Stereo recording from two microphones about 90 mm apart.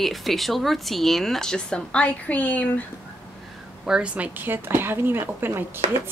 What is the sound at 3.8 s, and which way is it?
Speech, 10° right (ahead or behind).